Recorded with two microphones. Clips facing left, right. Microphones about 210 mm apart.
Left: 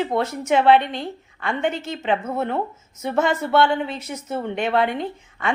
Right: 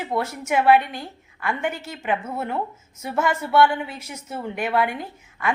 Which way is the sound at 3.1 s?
25° left (ahead or behind).